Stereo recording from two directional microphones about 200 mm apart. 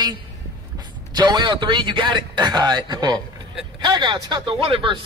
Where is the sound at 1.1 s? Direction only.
20° right (ahead or behind).